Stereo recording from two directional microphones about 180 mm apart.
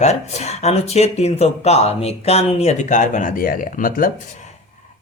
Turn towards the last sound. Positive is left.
turn(degrees=50)  # may be behind; listen again after turning